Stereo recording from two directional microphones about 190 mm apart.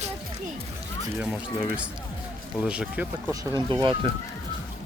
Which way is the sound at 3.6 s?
25° right (ahead or behind).